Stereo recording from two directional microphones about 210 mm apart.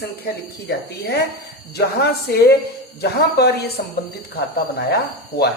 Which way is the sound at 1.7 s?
50° left (ahead or behind).